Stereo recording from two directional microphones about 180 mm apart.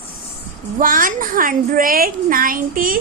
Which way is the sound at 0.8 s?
50° right (ahead or behind).